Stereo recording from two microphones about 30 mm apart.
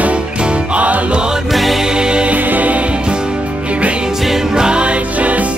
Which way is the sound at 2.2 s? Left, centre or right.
Right.